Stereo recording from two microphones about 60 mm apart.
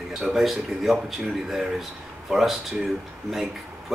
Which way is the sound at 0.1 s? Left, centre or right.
Centre.